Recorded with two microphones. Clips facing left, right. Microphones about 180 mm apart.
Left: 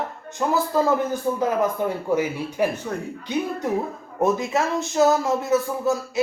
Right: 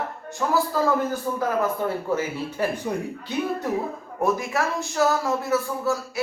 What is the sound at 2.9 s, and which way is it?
Speech, 15° right (ahead or behind).